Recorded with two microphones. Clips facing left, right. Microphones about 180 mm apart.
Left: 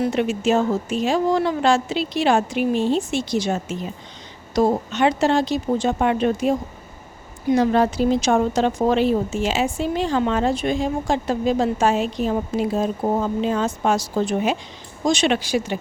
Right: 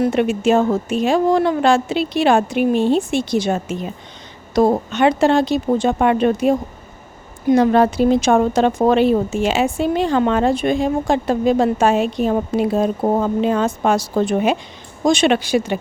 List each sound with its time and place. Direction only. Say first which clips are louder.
0.0 s speech: right 4 dB; 55° right (ahead or behind)